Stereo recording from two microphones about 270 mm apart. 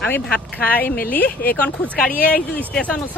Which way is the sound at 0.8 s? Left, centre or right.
Left.